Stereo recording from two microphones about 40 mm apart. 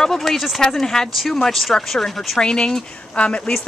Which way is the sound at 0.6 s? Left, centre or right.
Centre.